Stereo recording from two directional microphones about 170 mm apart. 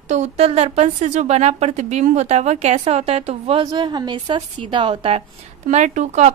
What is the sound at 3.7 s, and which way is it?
A woman's voice, 25° right (ahead or behind).